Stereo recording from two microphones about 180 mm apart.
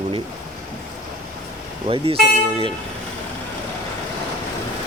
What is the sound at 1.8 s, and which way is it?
Speech, 30° right (ahead or behind).